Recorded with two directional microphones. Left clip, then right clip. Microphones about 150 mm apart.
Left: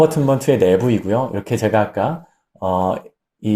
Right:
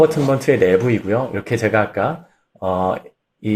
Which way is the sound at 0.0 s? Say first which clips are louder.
Even; 45° left (ahead or behind).